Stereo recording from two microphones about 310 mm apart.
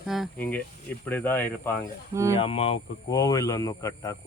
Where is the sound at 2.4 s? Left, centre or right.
Centre.